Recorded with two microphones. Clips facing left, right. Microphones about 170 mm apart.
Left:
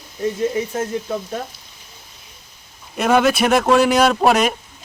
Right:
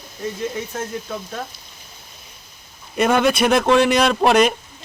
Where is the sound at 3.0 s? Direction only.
Centre (ahead or behind).